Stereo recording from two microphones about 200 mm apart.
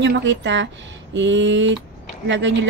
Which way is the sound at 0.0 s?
65° right (ahead or behind).